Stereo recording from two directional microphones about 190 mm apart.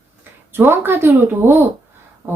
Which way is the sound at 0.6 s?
10° right (ahead or behind).